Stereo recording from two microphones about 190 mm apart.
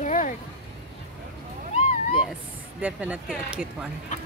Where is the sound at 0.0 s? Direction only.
40° left (ahead or behind).